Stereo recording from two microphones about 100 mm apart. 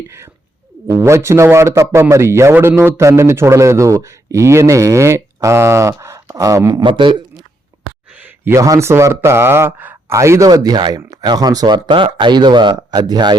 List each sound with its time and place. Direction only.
0.9 s a man's voice: 30° right (ahead or behind)
6.8 s a man's voice: 55° right (ahead or behind)
8.1 s a sound: 15° right (ahead or behind)
8.5 s speech: 35° right (ahead or behind)